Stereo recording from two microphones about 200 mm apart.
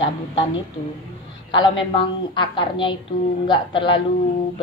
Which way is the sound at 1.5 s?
25° left (ahead or behind).